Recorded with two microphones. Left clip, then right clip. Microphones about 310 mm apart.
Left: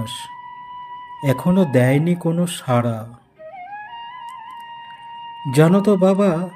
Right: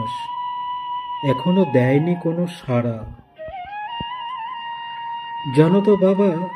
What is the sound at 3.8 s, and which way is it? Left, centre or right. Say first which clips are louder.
Music: right 5 dB; centre.